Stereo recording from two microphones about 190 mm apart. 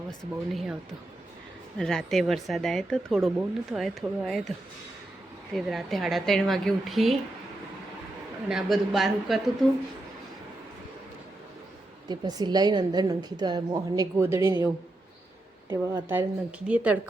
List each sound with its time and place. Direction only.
0.5 s a woman's voice: centre (ahead or behind)
1.8 s a woman's voice: centre (ahead or behind)
5.5 s a woman's voice: centre (ahead or behind)
8.4 s a woman's voice: centre (ahead or behind)
12.0 s a woman's voice: 20° right (ahead or behind)
15.7 s speech: 15° right (ahead or behind)